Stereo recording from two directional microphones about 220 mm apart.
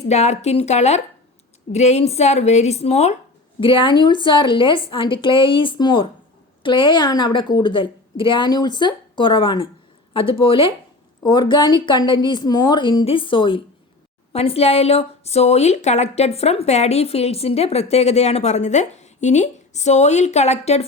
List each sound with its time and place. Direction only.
0.1 s a woman's voice: 30° left (ahead or behind)